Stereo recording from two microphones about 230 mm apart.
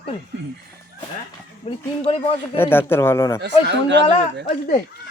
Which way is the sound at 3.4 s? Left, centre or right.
Right.